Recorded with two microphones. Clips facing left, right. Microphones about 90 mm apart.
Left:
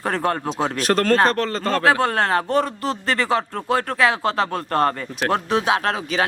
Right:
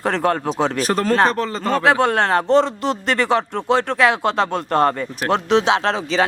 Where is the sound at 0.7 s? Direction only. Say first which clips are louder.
Left 2 dB; 5° right (ahead or behind).